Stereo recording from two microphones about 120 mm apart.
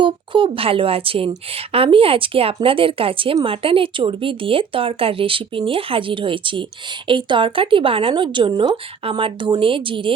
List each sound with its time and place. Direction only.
0.0 s speech: 45° right (ahead or behind)